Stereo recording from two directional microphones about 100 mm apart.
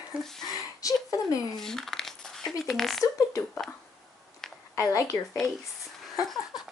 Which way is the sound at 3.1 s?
35° left (ahead or behind).